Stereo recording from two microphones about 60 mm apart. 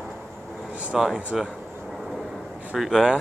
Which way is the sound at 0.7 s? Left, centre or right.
Right.